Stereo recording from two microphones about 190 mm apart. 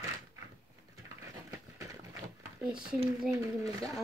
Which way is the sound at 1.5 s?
15° right (ahead or behind).